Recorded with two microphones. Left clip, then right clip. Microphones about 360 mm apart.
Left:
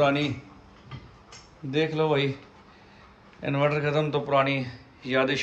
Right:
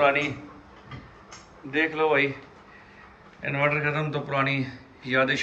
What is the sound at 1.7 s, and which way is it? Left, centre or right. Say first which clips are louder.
Speech: right 2 dB; centre.